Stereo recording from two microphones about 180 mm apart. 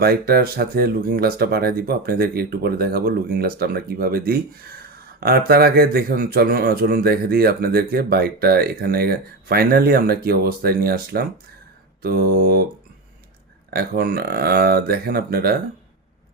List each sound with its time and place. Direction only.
0.0 s speech: 60° right (ahead or behind)
13.7 s speech: 55° right (ahead or behind)